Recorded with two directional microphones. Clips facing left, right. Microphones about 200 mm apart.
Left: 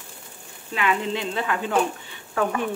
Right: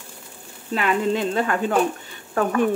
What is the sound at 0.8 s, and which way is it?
A woman's voice, 45° right (ahead or behind).